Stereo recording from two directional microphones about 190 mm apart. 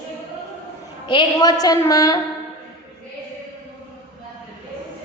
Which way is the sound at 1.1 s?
25° left (ahead or behind).